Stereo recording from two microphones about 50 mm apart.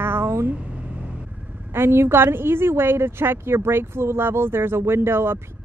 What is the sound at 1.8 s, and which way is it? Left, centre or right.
A woman's voice, right.